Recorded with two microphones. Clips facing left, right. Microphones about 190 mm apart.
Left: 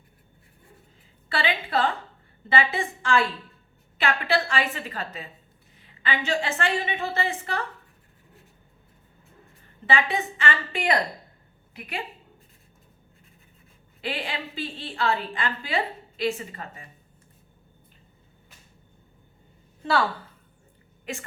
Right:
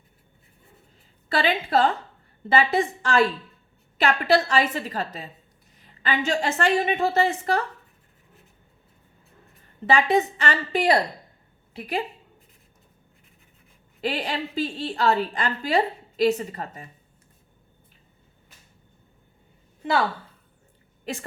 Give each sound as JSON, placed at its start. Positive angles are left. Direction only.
{"t": 1.3, "sound": "a woman's voice", "side_deg": -40}
{"t": 9.8, "sound": "a woman's voice", "side_deg": -40}
{"t": 14.0, "sound": "a woman's voice", "side_deg": -40}
{"t": 19.8, "sound": "a woman's voice", "side_deg": -15}
{"t": 21.0, "sound": "speech", "side_deg": -35}